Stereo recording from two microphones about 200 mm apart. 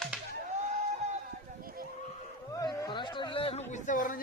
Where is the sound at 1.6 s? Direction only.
45° right (ahead or behind).